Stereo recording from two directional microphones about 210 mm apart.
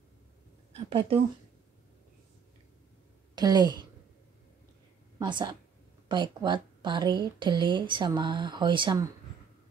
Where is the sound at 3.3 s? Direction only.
20° right (ahead or behind).